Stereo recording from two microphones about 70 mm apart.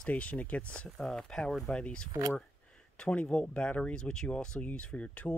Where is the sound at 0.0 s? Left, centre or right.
Centre.